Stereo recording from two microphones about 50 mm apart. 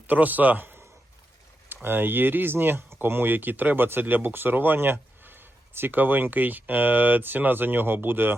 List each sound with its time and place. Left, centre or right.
0.1 s a man's voice: right